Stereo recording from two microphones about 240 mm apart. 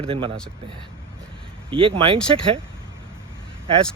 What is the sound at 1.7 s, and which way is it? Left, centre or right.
Speech, right.